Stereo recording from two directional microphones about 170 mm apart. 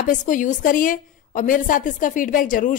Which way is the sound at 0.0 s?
50° left (ahead or behind).